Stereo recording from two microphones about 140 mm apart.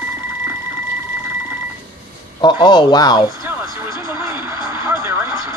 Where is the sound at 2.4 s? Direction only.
30° left (ahead or behind).